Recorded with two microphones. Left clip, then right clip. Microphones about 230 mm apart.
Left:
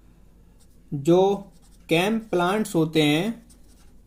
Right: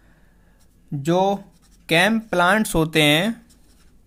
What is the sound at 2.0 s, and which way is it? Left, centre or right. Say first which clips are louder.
Speech: right 7 dB; right.